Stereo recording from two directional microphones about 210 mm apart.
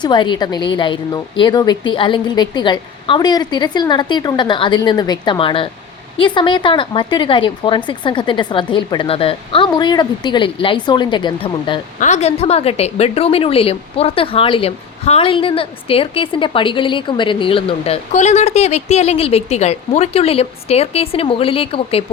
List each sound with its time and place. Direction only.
0.0 s a woman's voice: 20° left (ahead or behind)